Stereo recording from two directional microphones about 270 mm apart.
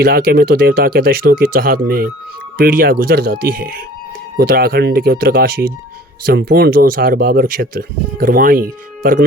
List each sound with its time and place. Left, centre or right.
0.0 s speech: right